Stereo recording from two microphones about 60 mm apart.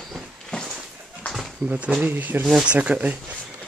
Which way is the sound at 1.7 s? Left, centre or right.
Right.